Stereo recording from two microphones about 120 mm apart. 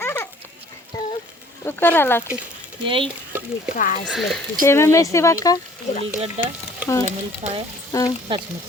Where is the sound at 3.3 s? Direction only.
15° right (ahead or behind).